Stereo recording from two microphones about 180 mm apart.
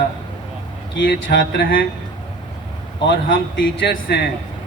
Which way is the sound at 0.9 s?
70° left (ahead or behind).